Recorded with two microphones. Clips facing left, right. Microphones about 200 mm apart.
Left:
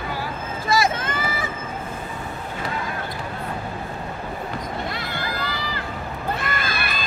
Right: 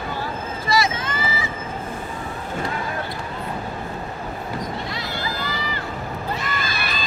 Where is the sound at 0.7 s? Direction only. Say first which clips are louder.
Left 1 dB; 50° left (ahead or behind).